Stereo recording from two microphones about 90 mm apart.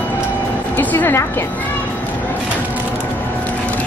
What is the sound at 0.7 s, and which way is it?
Speech, 20° left (ahead or behind).